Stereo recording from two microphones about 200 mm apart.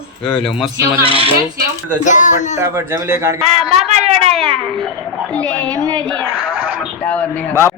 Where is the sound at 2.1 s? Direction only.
40° left (ahead or behind).